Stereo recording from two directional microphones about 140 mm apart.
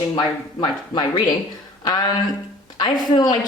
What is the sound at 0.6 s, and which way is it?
Speech, 35° left (ahead or behind).